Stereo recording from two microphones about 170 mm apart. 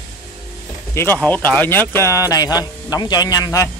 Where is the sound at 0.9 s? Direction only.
10° left (ahead or behind).